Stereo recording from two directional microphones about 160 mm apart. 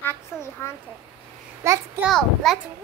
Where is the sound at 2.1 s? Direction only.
Centre (ahead or behind).